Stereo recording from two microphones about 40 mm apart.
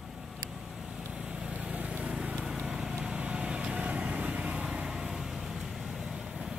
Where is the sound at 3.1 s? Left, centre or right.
Right.